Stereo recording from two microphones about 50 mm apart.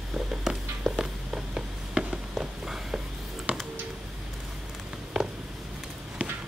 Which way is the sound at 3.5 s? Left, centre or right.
Right.